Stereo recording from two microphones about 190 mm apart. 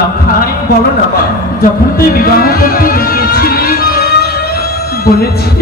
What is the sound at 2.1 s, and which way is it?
Music, 50° left (ahead or behind).